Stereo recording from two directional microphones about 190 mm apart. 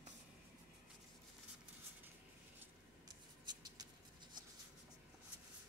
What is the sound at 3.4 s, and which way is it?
Mouse, 20° right (ahead or behind).